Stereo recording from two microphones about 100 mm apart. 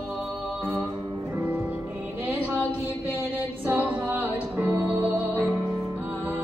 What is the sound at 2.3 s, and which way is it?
Music, 15° right (ahead or behind).